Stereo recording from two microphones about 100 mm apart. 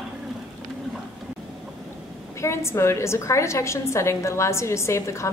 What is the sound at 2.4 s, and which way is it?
A woman's voice, 25° left (ahead or behind).